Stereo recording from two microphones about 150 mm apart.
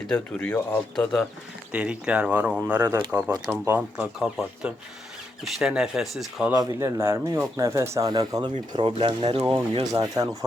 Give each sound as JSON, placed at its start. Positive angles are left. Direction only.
{"t": 0.1, "sound": "speech", "side_deg": 10}
{"t": 1.7, "sound": "speech", "side_deg": -5}
{"t": 6.5, "sound": "speech", "side_deg": -20}
{"t": 9.8, "sound": "speech", "side_deg": -25}